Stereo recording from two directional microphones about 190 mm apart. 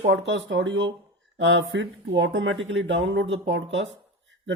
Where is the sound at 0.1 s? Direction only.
70° right (ahead or behind).